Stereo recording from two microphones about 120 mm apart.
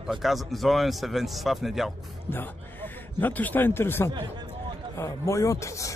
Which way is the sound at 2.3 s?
15° left (ahead or behind).